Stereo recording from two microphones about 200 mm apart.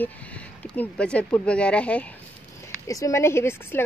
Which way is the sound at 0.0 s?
5° left (ahead or behind).